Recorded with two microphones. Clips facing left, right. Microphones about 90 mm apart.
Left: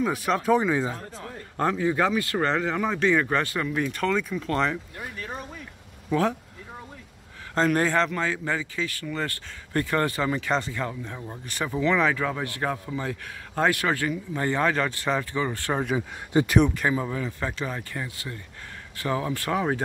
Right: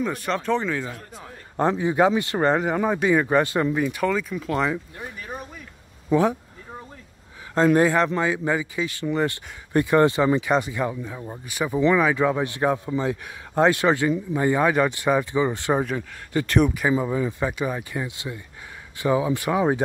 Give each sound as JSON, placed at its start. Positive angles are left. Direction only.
{"t": 0.0, "sound": "speech", "side_deg": 5}
{"t": 1.2, "sound": "speech", "side_deg": -20}
{"t": 5.1, "sound": "a sound", "side_deg": -15}
{"t": 6.0, "sound": "speech", "side_deg": -15}
{"t": 7.5, "sound": "a man's voice", "side_deg": -10}
{"t": 16.6, "sound": "speech", "side_deg": -10}